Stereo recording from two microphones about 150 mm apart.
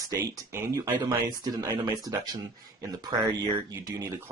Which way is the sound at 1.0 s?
30° right (ahead or behind).